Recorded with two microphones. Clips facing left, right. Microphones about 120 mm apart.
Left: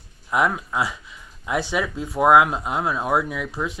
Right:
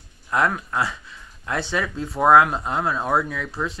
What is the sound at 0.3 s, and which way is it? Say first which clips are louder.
Speech: even; 10° left (ahead or behind).